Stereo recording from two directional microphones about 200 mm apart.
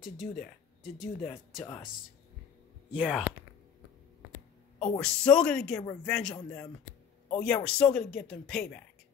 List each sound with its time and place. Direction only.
0.0 s speech: centre (ahead or behind)
2.9 s speech: 5° right (ahead or behind)
5.0 s a man's voice: 5° left (ahead or behind)